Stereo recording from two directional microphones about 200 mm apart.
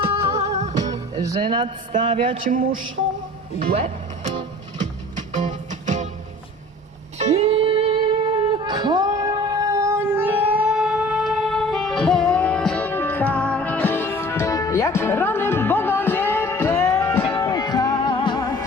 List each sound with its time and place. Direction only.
0.0 s music: 30° right (ahead or behind)
1.1 s a man's voice: 20° right (ahead or behind)
3.6 s speech: 45° right (ahead or behind)
5.4 s music: 40° right (ahead or behind)
7.2 s music: 30° right (ahead or behind); by 18.4 s 25° left (ahead or behind)